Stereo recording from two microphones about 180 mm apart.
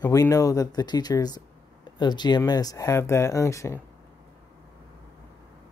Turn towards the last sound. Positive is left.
turn(degrees=15)  # may be behind; listen again after turning